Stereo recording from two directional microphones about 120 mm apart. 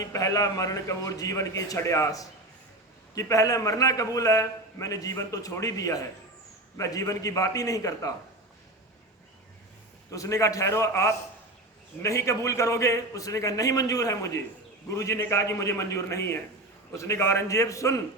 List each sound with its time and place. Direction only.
0.0 s a man's voice: 30° left (ahead or behind)
10.1 s a man's voice: 25° left (ahead or behind)